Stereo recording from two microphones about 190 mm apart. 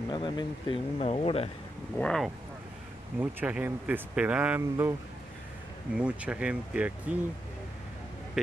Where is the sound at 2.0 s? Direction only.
5° left (ahead or behind).